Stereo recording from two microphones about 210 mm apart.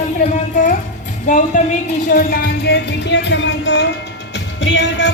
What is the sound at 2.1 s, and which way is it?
Speech, 45° left (ahead or behind).